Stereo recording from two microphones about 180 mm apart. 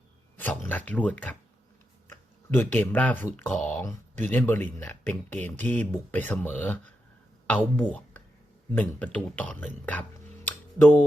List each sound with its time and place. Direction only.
0.3 s speech: 10° left (ahead or behind)